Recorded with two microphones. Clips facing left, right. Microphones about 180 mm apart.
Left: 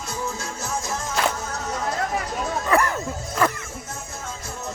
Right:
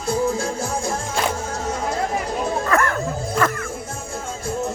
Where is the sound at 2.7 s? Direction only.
20° left (ahead or behind).